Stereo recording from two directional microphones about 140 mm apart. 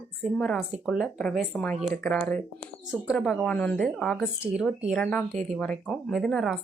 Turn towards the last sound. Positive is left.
turn(degrees=0)  # may be behind; listen again after turning